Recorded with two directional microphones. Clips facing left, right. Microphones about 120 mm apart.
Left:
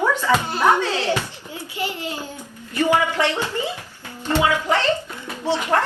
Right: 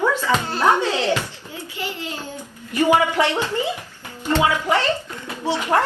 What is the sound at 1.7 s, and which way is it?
Speech, 15° left (ahead or behind).